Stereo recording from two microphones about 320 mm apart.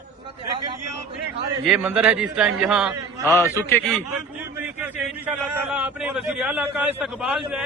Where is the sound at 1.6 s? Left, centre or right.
Centre.